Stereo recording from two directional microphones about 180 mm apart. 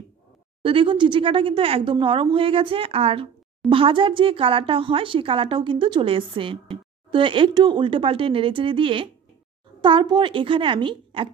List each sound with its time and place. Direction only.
0.6 s speech: 30° right (ahead or behind)